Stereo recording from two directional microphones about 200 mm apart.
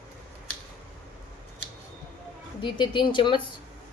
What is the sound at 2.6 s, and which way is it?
Speech, 25° left (ahead or behind).